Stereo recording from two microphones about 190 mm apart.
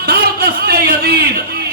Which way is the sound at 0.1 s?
55° right (ahead or behind).